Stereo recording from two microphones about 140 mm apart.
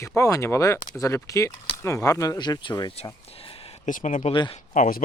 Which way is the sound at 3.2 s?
45° left (ahead or behind).